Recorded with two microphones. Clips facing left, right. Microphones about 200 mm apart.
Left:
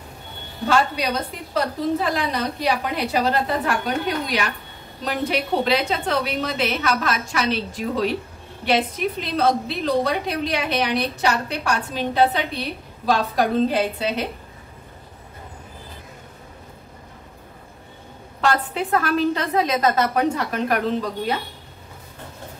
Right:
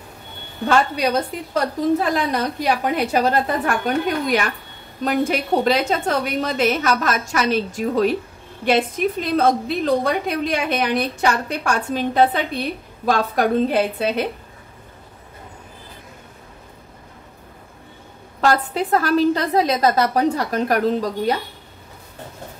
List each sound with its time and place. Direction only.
0.7 s a woman's voice: 50° right (ahead or behind)
18.4 s a woman's voice: 40° right (ahead or behind)